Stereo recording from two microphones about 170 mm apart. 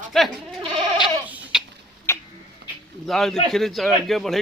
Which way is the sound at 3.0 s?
Centre (ahead or behind).